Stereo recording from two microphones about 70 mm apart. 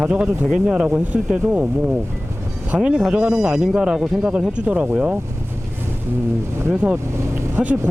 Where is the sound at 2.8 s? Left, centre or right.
Centre.